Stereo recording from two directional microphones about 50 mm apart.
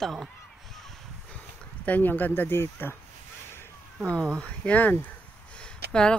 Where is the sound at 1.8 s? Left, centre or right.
Left.